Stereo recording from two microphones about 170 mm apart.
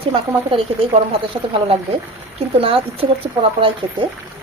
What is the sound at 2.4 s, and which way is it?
A woman's voice, 35° right (ahead or behind).